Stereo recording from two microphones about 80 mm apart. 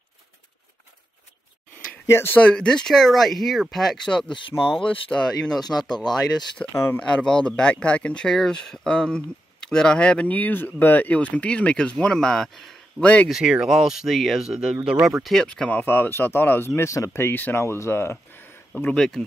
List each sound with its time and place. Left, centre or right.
2.0 s speech: left
2.3 s speech: centre
6.7 s speech: left
7.0 s speech: centre
13.0 s speech: centre
13.3 s speech: centre
15.4 s speech: centre
15.8 s speech: left
18.9 s speech: centre